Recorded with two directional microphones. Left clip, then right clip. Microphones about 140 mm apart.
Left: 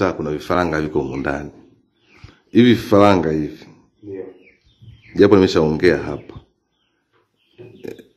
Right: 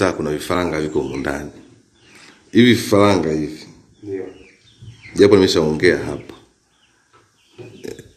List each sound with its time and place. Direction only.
0.0 s a man's voice: 20° left (ahead or behind)
0.5 s speech: 40° left (ahead or behind)
1.1 s speech: 30° left (ahead or behind)
2.5 s speech: 40° left (ahead or behind)
5.1 s speech: 40° left (ahead or behind)